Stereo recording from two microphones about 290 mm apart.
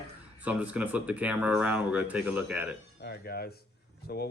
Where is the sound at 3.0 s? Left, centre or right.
Left.